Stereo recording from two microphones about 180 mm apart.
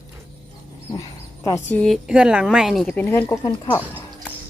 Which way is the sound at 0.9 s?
20° left (ahead or behind).